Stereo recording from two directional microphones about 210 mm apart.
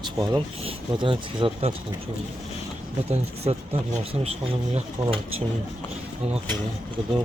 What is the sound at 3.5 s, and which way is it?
Speech, 30° right (ahead or behind).